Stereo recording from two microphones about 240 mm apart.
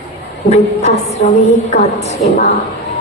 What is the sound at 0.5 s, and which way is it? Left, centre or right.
A woman's voice, left.